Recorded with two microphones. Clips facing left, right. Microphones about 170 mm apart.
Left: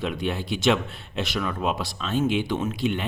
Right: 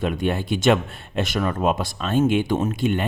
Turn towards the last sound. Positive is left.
turn(degrees=-50)  # may be behind; listen again after turning